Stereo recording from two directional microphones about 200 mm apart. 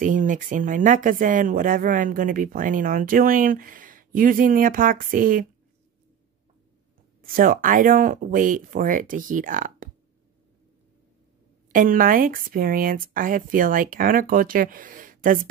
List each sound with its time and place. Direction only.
0.0 s speech: 40° right (ahead or behind)
7.2 s speech: 45° right (ahead or behind)
11.7 s speech: 45° right (ahead or behind)